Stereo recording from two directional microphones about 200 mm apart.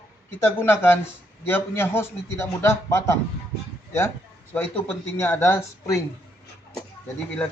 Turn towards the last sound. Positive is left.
turn(degrees=10)  # may be behind; listen again after turning